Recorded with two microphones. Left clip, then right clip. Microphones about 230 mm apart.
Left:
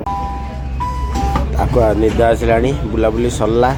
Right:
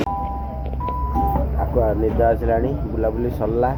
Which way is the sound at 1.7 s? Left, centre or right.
Left.